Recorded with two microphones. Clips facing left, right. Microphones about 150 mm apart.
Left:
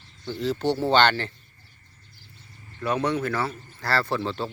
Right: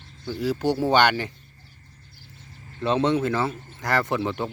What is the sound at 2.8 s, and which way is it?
Speech, 25° right (ahead or behind).